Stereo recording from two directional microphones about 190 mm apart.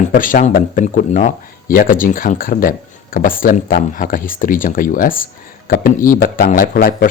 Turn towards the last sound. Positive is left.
turn(degrees=50)  # may be behind; listen again after turning